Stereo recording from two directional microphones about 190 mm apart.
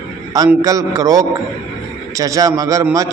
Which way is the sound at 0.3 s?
20° right (ahead or behind).